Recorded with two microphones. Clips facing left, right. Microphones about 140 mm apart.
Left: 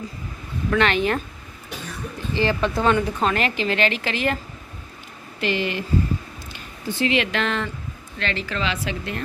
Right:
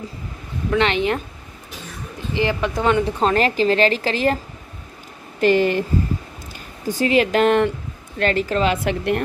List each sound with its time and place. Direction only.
0.7 s speech: 25° right (ahead or behind)
2.3 s a woman's voice: 15° right (ahead or behind); by 4.4 s 35° right (ahead or behind)
5.4 s a woman's voice: 45° right (ahead or behind)